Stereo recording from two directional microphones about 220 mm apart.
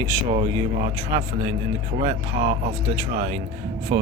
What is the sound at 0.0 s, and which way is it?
Speech, 15° right (ahead or behind).